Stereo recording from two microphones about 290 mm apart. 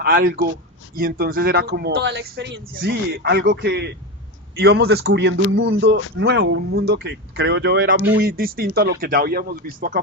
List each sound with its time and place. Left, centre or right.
0.0 s speech: right